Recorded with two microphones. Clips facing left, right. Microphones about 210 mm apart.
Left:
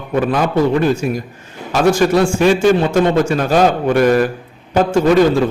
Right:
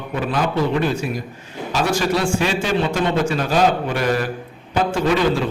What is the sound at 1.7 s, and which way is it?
A man's voice, 50° left (ahead or behind).